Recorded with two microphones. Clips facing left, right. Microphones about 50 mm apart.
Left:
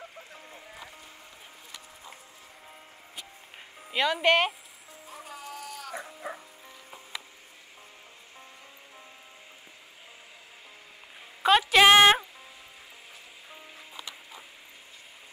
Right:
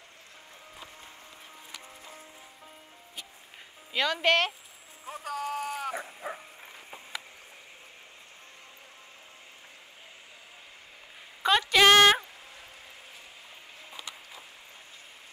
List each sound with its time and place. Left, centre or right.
3.9 s speech: centre
5.2 s music: right
5.9 s bow-wow: centre
11.7 s a sound: centre